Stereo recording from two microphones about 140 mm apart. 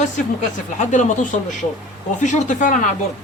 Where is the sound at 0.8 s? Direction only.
60° left (ahead or behind).